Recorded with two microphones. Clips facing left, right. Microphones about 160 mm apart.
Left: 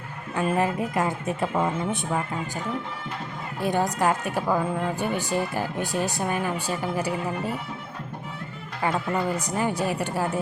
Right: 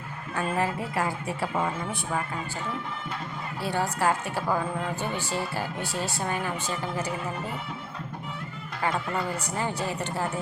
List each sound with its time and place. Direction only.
0.3 s speech: 20° left (ahead or behind)
3.6 s speech: 15° left (ahead or behind)
9.1 s speech: 15° left (ahead or behind)